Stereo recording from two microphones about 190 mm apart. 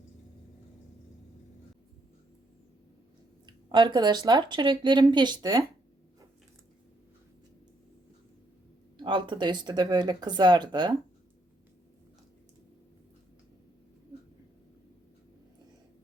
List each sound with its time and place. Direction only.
3.4 s speech: 25° right (ahead or behind)
9.0 s speech: 25° right (ahead or behind)